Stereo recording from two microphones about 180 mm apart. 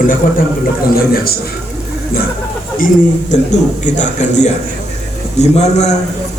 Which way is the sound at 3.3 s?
40° left (ahead or behind).